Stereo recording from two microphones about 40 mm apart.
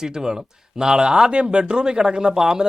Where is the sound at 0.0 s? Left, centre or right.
Centre.